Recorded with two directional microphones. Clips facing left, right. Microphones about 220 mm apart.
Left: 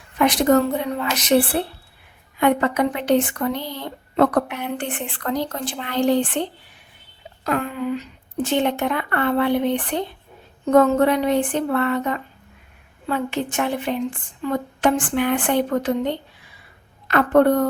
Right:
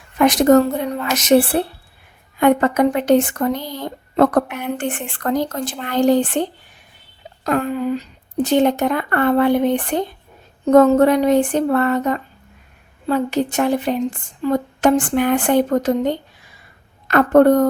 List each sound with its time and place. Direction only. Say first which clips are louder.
0.2 s a woman's voice: right 4 dB; 45° right (ahead or behind)